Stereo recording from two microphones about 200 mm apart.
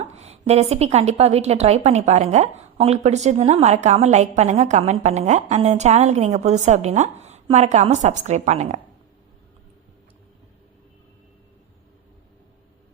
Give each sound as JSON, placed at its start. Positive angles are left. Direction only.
{"t": 0.0, "sound": "a woman's voice", "side_deg": -35}